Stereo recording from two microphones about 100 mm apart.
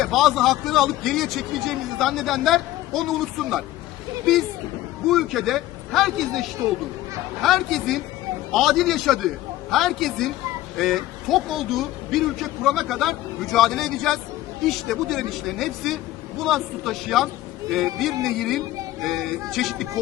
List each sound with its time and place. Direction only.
0.0 s a man's voice: centre (ahead or behind)
5.0 s a man's voice: centre (ahead or behind)